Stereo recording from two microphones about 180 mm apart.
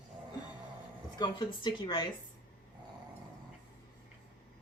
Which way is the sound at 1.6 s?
25° left (ahead or behind).